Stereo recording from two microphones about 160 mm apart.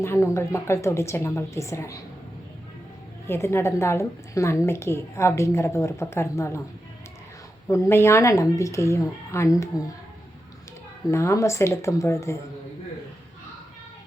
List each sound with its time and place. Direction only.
0.0 s a woman's voice: 15° left (ahead or behind)
3.2 s a woman's voice: 15° left (ahead or behind)
7.7 s a woman's voice: 15° left (ahead or behind)
11.1 s a woman's voice: 15° left (ahead or behind)